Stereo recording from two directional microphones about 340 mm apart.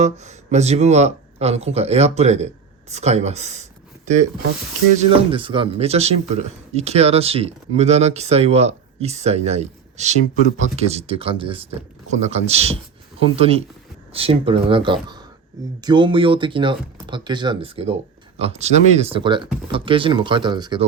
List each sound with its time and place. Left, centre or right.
0.0 s speech: centre